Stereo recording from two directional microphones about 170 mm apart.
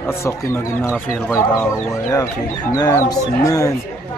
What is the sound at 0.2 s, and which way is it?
Speech, 15° left (ahead or behind).